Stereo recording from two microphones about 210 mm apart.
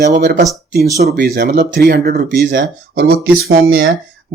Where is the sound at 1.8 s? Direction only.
50° right (ahead or behind).